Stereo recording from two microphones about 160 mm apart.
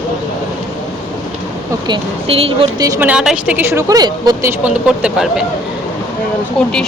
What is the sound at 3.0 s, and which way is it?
Speech, 5° right (ahead or behind).